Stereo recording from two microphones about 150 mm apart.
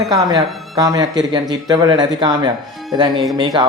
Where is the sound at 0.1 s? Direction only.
25° right (ahead or behind).